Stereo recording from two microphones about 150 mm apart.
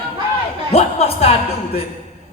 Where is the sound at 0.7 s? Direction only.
45° left (ahead or behind).